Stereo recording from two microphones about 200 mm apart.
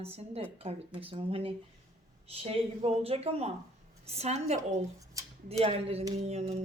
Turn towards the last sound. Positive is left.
turn(degrees=-35)  # may be behind; listen again after turning